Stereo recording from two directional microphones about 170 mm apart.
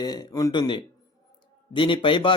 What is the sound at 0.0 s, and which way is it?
A man's voice, 25° left (ahead or behind).